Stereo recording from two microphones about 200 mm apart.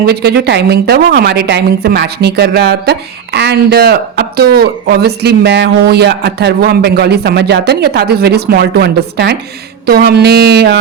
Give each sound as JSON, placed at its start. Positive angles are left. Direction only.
{"t": 0.0, "sound": "a woman's voice", "side_deg": -55}